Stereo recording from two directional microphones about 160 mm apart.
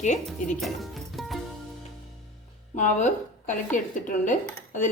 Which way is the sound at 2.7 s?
50° left (ahead or behind).